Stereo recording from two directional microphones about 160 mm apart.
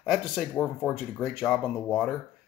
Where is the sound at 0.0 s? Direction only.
Centre (ahead or behind).